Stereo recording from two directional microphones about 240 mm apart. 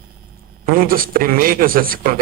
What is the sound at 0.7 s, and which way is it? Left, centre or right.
Speech, right.